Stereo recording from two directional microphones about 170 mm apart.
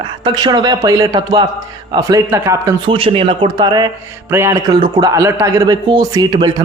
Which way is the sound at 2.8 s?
30° right (ahead or behind).